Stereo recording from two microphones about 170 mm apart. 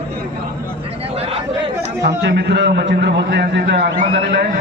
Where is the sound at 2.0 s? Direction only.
80° right.